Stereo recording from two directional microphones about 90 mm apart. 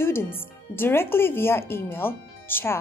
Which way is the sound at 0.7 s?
25° left (ahead or behind).